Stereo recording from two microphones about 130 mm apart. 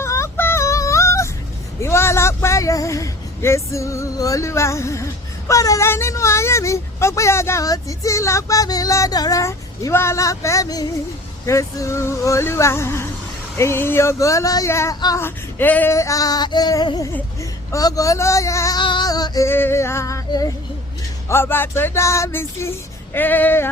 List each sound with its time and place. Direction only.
0.0 s female singing: 20° left (ahead or behind)
1.8 s speech: 20° left (ahead or behind)
18.8 s music: 35° left (ahead or behind)
19.5 s speech: 20° left (ahead or behind)
23.1 s music: 15° left (ahead or behind)